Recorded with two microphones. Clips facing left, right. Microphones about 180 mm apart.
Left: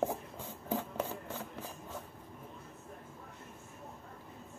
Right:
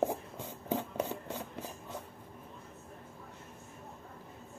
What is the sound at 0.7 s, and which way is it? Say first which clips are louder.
Rub: right 2 dB; 20° right (ahead or behind).